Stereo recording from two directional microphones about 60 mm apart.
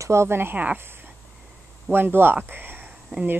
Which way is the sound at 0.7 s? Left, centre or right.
Right.